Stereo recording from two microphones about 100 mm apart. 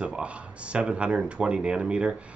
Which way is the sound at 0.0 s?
10° right (ahead or behind).